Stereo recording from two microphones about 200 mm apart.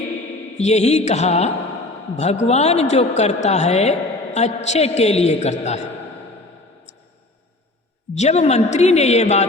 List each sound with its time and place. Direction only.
0.6 s a woman's voice: 35° left (ahead or behind)
8.1 s a woman's voice: 35° left (ahead or behind)